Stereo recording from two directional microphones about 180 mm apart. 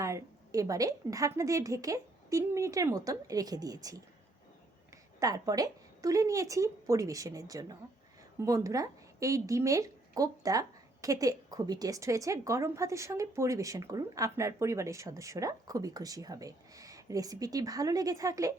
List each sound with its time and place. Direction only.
0.0 s a woman's voice: 15° right (ahead or behind)
5.2 s a woman's voice: 20° right (ahead or behind)